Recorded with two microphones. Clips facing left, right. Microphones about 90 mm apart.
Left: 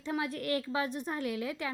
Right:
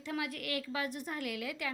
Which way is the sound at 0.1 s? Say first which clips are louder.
Left 5 dB; 30° left (ahead or behind).